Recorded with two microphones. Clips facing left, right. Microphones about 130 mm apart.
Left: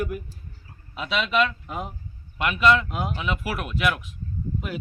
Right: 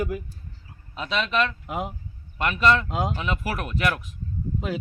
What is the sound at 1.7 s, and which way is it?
Speech, 20° right (ahead or behind).